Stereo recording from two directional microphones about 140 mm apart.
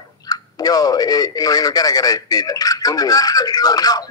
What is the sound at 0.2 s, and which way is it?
Speech, 25° left (ahead or behind).